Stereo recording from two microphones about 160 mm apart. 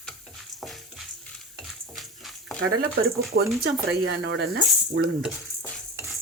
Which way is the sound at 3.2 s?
75° right (ahead or behind).